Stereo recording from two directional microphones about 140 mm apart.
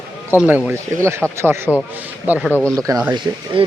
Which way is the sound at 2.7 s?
25° right (ahead or behind).